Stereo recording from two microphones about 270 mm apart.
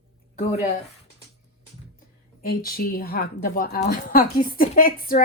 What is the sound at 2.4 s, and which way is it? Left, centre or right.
A woman's voice, left.